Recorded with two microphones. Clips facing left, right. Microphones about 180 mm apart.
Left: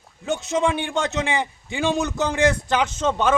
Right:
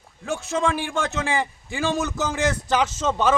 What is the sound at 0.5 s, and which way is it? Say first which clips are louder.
Speech: left 1 dB; 10° left (ahead or behind).